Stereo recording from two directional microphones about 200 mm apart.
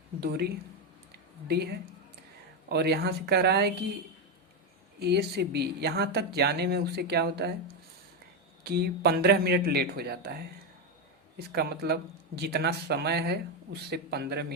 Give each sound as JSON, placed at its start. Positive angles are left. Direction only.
{"t": 1.5, "sound": "speech", "side_deg": -55}
{"t": 4.9, "sound": "speech", "side_deg": -55}
{"t": 8.6, "sound": "speech", "side_deg": -55}
{"t": 11.3, "sound": "speech", "side_deg": -55}